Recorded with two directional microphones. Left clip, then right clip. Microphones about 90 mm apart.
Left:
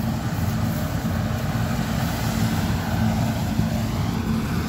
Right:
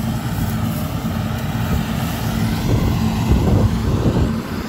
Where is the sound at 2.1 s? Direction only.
15° right (ahead or behind).